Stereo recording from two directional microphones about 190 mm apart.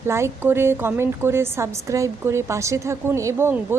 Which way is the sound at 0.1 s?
15° right (ahead or behind).